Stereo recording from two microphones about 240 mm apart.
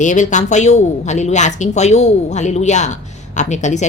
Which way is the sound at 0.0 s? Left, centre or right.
Left.